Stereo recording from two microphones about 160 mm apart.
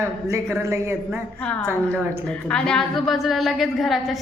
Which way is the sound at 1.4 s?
10° left (ahead or behind).